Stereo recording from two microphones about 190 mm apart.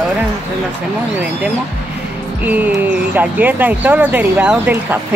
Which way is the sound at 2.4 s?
10° right (ahead or behind).